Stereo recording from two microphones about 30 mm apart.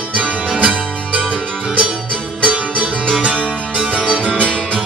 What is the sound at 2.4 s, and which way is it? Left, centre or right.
Music, right.